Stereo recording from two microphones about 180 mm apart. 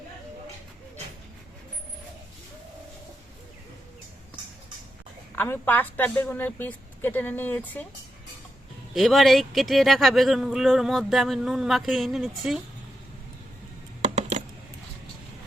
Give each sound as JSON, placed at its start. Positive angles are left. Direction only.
{"t": 5.4, "sound": "a woman's voice", "side_deg": 10}
{"t": 9.0, "sound": "speech", "side_deg": 0}
{"t": 14.0, "sound": "computer keyboard", "side_deg": -40}